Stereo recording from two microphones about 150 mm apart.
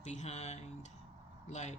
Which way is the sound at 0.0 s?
50° left (ahead or behind).